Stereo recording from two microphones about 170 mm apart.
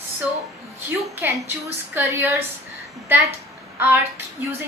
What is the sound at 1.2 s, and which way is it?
A woman's voice, 10° right (ahead or behind).